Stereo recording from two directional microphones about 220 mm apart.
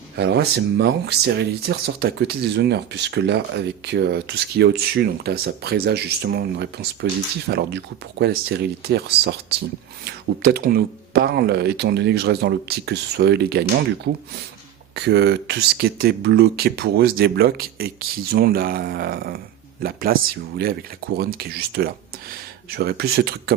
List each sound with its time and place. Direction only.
0.2 s speech: 50° right (ahead or behind)